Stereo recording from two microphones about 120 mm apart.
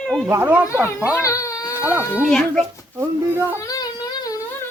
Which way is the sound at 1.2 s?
25° left (ahead or behind).